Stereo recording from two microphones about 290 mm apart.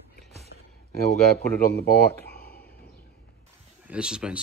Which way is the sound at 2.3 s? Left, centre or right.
Left.